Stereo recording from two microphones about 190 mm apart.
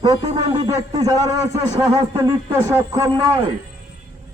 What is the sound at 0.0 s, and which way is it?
Speech, 20° right (ahead or behind).